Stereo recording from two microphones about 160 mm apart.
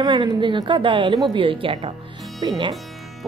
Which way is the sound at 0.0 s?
30° right (ahead or behind).